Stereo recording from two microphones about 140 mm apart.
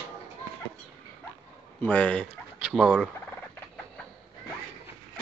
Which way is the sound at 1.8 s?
10° left (ahead or behind).